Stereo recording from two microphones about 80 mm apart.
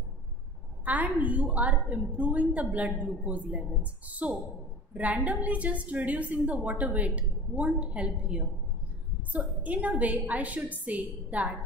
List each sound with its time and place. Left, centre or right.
0.8 s a woman's voice: right